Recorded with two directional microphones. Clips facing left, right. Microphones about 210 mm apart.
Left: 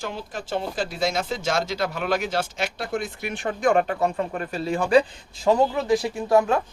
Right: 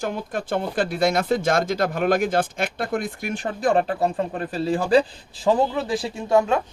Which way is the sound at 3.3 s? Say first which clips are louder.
Even; 35° right (ahead or behind).